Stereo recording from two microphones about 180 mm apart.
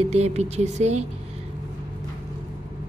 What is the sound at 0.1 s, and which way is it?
Speech, 40° right (ahead or behind).